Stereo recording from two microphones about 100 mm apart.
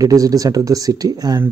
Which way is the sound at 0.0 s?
35° right (ahead or behind).